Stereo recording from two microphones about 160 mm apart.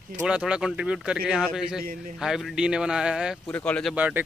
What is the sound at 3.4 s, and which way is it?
Speech, 10° left (ahead or behind).